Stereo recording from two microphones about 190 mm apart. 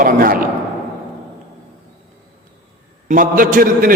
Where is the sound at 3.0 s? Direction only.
45° right (ahead or behind).